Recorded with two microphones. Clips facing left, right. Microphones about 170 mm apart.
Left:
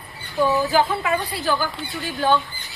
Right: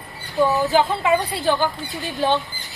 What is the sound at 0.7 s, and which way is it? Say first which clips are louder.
Speech: right 2 dB; 25° right (ahead or behind).